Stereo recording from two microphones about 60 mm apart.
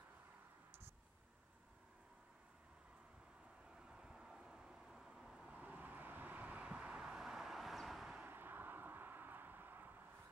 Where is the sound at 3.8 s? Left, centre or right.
Centre.